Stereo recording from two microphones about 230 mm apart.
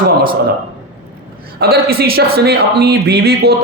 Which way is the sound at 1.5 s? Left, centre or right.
Right.